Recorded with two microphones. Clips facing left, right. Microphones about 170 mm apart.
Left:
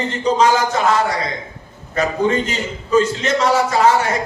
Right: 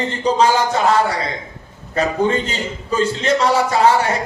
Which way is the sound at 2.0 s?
30° right (ahead or behind).